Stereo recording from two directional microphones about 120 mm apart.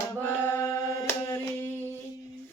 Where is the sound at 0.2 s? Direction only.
20° left (ahead or behind).